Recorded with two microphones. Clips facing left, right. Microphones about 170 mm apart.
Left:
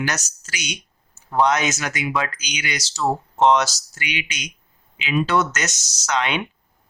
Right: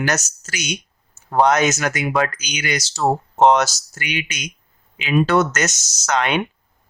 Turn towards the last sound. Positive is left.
turn(degrees=-50)  # may be behind; listen again after turning